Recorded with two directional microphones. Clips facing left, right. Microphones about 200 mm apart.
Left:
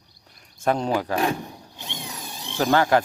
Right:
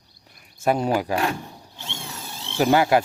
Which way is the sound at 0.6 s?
10° right (ahead or behind).